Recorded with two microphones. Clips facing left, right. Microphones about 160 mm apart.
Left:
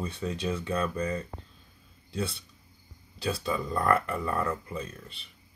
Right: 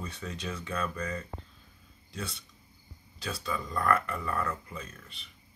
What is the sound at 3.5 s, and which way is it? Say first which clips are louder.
Speech: left 2 dB; 20° left (ahead or behind).